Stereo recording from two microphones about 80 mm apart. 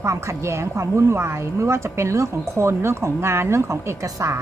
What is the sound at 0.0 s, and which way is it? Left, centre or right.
A woman's voice, right.